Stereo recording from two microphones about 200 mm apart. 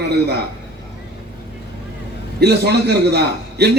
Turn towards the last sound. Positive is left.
turn(degrees=-55)  # may be behind; listen again after turning